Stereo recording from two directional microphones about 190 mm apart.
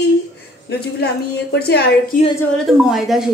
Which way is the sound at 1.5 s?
60° left (ahead or behind).